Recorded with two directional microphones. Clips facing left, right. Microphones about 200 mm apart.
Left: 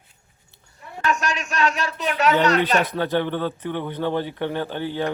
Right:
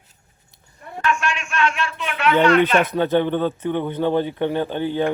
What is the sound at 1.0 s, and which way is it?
Speech, 40° left (ahead or behind).